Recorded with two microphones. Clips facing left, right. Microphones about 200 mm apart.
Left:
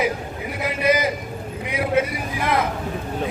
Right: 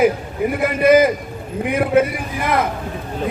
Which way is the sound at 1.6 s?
55° right (ahead or behind).